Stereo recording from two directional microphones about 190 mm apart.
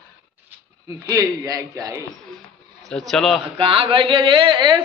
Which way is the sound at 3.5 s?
30° right (ahead or behind).